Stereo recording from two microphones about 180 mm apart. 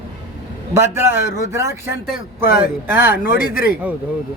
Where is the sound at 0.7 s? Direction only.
15° right (ahead or behind).